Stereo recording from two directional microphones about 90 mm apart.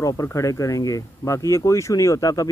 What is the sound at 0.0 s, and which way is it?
Speech, 40° left (ahead or behind).